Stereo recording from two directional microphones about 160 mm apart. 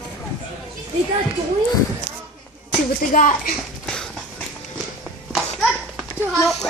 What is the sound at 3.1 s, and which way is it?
Speech, 55° left (ahead or behind).